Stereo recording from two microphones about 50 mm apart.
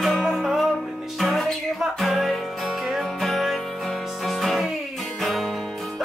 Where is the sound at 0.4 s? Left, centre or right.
Centre.